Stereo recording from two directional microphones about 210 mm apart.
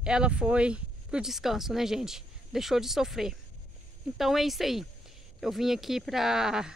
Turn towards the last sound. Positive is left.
turn(degrees=-5)  # may be behind; listen again after turning